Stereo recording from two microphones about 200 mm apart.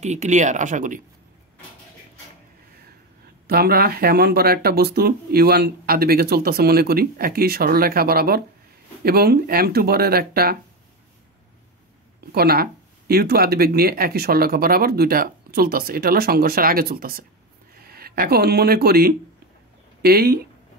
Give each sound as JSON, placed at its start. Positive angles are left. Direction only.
{"t": 0.0, "sound": "speech", "side_deg": -35}
{"t": 3.4, "sound": "speech", "side_deg": -50}
{"t": 12.3, "sound": "speech", "side_deg": -50}